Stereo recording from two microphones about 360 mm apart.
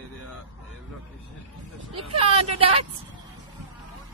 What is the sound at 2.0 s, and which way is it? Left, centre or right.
Vehicle, centre.